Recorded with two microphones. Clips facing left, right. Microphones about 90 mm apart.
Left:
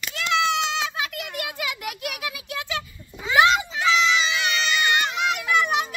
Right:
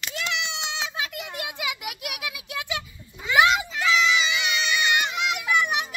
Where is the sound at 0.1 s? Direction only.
20° right (ahead or behind).